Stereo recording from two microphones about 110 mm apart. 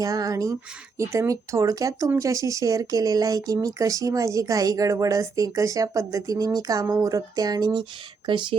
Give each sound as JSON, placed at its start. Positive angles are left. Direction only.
{"t": 0.0, "sound": "speech", "side_deg": -30}